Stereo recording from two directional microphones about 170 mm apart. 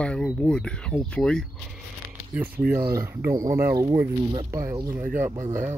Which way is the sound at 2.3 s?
10° right (ahead or behind).